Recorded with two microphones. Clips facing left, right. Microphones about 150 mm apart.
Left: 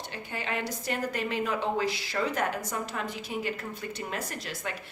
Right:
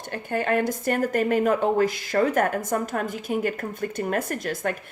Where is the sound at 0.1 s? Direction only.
50° right (ahead or behind).